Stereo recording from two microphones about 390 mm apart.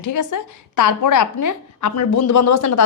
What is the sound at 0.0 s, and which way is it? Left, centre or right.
A woman's voice, left.